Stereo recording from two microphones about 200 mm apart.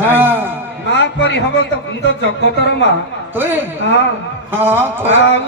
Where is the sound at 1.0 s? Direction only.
60° left (ahead or behind).